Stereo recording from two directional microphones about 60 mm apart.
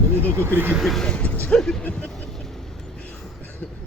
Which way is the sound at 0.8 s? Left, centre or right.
Centre.